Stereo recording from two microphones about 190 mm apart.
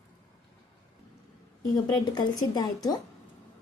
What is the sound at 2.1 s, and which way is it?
Speech, 20° left (ahead or behind).